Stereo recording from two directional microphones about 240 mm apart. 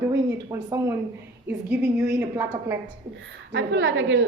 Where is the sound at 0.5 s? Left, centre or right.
Centre.